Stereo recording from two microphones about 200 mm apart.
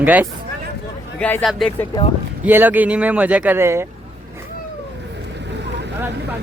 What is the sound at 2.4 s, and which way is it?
Speech, 10° right (ahead or behind).